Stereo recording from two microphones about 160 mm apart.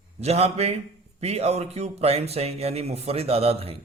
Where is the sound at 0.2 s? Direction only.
40° right (ahead or behind).